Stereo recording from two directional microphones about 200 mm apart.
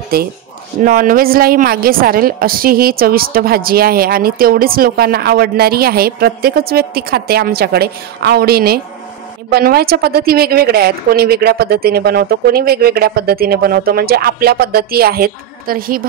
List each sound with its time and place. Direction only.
0.8 s a woman's voice: 45° right (ahead or behind)